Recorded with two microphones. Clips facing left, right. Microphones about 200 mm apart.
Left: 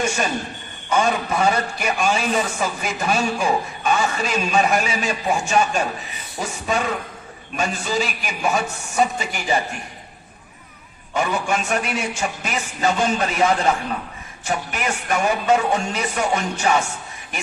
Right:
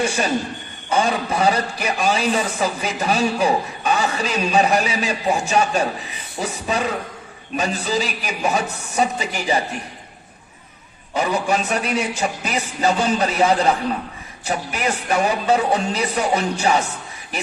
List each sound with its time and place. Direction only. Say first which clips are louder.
0.0 s a man's voice: right 2 dB; 35° right (ahead or behind)
11.1 s a man's voice: right 2 dB; 35° right (ahead or behind)